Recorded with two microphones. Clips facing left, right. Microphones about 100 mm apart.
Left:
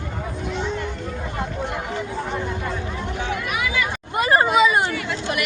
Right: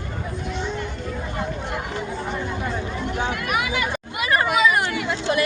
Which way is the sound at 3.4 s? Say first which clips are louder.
Even; 50° right (ahead or behind).